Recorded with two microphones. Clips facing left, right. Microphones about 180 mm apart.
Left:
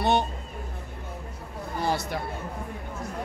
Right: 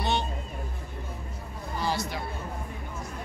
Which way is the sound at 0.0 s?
60° left (ahead or behind).